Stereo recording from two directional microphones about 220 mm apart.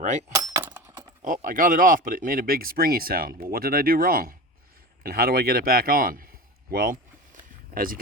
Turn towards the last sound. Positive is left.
turn(degrees=-40)  # may be behind; listen again after turning